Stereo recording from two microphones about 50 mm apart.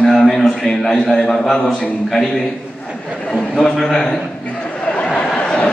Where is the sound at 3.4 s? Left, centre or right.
Centre.